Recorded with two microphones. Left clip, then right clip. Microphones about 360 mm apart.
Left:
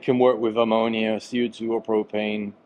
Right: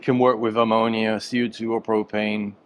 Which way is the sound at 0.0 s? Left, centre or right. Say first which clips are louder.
Even; right.